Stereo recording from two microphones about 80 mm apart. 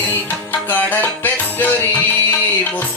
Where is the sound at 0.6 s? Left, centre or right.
Left.